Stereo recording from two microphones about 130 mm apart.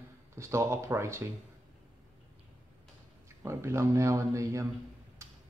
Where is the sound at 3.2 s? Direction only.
20° right (ahead or behind).